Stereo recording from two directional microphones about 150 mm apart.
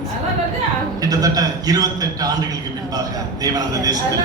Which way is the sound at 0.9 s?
25° right (ahead or behind).